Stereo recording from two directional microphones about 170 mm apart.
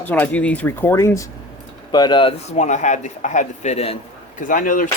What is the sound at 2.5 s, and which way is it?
Speech, 45° left (ahead or behind).